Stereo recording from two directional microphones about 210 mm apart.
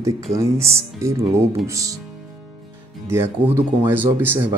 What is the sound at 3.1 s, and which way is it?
Speech, 10° right (ahead or behind).